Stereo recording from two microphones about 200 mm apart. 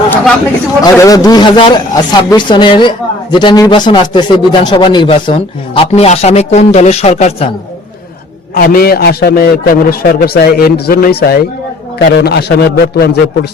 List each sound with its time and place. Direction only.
0.8 s a man's voice: 15° left (ahead or behind)
8.5 s a man's voice: 50° left (ahead or behind)